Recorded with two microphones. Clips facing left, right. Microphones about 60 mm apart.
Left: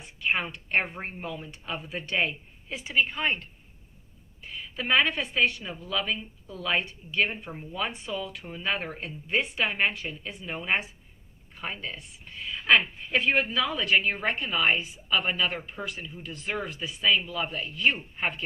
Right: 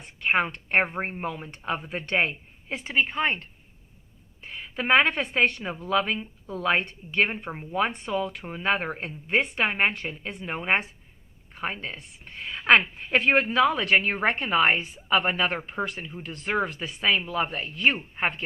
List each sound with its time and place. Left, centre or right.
0.0 s a woman's voice: right
3.1 s a woman's voice: right
4.5 s a woman's voice: right